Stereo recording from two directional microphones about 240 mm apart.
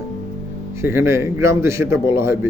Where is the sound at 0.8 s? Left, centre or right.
Centre.